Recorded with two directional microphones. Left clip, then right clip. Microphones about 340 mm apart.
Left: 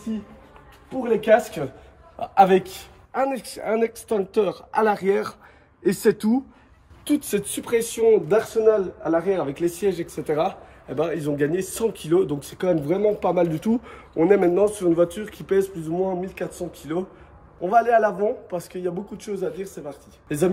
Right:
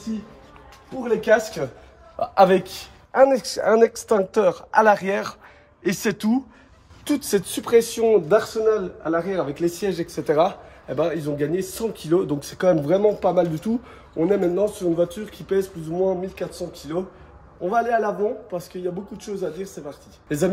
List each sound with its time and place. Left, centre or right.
2.1 s speech: centre